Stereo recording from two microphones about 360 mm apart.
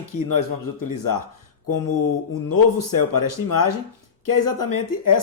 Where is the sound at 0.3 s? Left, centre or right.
Left.